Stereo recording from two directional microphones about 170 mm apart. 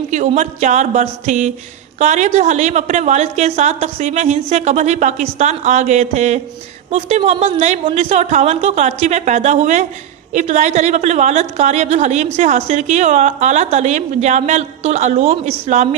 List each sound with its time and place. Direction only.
0.1 s a woman's voice: 45° right (ahead or behind)